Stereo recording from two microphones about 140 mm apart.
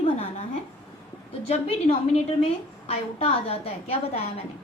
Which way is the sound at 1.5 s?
45° left (ahead or behind).